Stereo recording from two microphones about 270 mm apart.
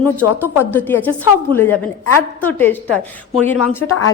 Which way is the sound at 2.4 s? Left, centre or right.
Centre.